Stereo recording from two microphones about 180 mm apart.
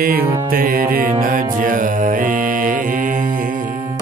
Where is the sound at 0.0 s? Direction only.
55° right (ahead or behind).